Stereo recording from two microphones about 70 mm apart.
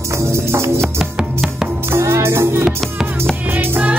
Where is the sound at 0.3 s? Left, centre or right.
Right.